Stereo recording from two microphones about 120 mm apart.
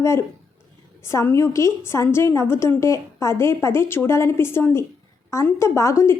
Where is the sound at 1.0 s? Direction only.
20° left (ahead or behind).